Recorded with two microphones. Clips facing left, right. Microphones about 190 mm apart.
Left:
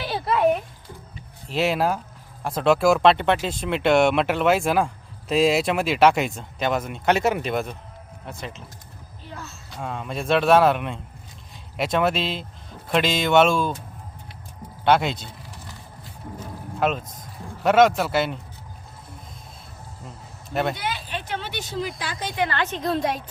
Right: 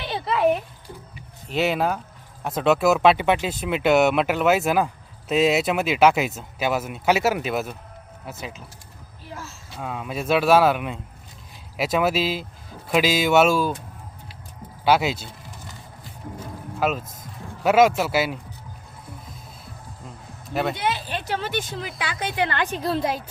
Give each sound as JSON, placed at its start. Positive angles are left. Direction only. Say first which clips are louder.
{"t": 0.1, "sound": "a sound", "louder": "even", "side_deg": 0}
{"t": 1.5, "sound": "speech", "louder": "even", "side_deg": 0}
{"t": 14.8, "sound": "speech", "louder": "even", "side_deg": -5}
{"t": 16.8, "sound": "speech", "louder": "left 1 dB", "side_deg": -5}
{"t": 20.5, "sound": "speech", "louder": "even", "side_deg": 0}
{"t": 20.7, "sound": "speech", "louder": "right 4 dB", "side_deg": -25}
{"t": 22.4, "sound": "a woman's voice", "louder": "even", "side_deg": -10}